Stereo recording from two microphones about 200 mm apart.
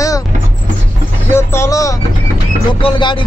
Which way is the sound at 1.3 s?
15° left (ahead or behind).